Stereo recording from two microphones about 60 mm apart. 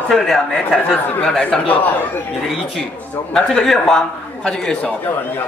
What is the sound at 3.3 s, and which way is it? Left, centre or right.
Speech, centre.